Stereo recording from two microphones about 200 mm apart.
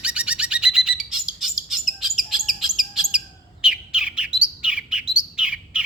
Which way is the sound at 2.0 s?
Centre (ahead or behind).